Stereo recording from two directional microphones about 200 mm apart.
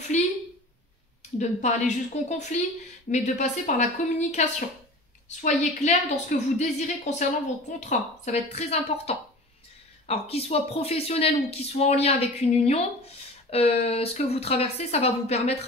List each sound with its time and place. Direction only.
0.1 s a woman's voice: 35° left (ahead or behind)
1.4 s speech: 35° left (ahead or behind)